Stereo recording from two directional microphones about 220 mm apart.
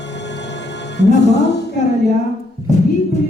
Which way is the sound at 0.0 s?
50° left (ahead or behind).